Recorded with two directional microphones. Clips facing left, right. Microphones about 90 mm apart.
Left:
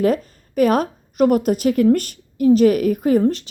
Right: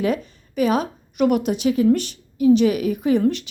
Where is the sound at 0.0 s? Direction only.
45° left (ahead or behind).